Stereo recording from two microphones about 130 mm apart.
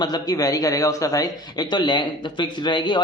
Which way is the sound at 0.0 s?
30° left (ahead or behind).